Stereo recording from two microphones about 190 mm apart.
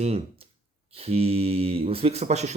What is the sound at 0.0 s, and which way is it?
Speech, 35° right (ahead or behind).